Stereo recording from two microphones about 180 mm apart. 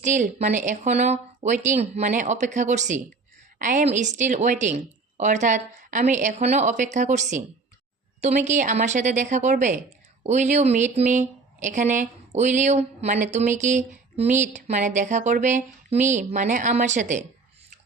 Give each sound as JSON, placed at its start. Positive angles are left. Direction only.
{"t": 0.0, "sound": "speech", "side_deg": -40}
{"t": 8.4, "sound": "speech", "side_deg": -45}